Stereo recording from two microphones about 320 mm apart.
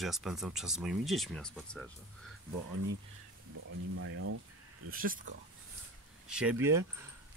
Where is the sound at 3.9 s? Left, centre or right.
Right.